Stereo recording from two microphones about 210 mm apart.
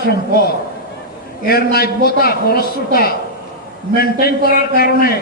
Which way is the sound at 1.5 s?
45° left (ahead or behind).